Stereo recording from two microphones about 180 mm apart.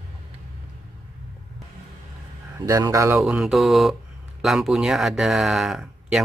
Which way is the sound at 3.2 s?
Centre (ahead or behind).